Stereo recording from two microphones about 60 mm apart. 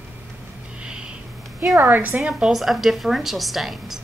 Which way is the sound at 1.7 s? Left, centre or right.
Right.